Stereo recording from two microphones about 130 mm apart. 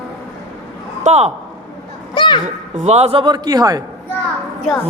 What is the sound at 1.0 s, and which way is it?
Speech, 55° right (ahead or behind).